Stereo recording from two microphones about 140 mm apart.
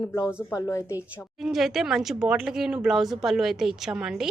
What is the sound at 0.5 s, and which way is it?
Speech, 20° left (ahead or behind).